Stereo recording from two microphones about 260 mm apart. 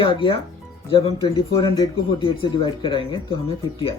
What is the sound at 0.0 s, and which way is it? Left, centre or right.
Speech, centre.